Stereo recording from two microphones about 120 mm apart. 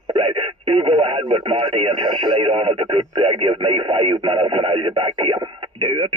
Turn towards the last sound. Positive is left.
turn(degrees=-45)  # may be behind; listen again after turning